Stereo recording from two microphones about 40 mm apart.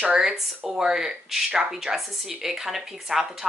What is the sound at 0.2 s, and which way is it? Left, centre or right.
Speech, centre.